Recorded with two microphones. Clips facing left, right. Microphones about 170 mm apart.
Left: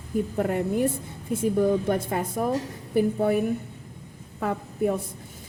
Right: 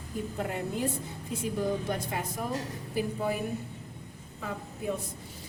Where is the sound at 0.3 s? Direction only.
55° left (ahead or behind).